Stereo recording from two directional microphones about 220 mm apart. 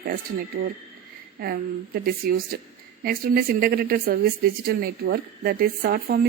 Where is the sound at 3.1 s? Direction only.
45° right (ahead or behind).